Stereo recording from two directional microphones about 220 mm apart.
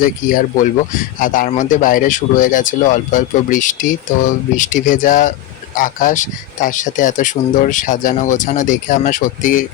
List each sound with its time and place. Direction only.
0.0 s speech: 40° left (ahead or behind)